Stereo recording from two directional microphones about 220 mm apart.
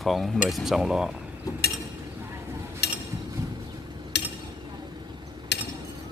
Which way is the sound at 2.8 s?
50° left (ahead or behind).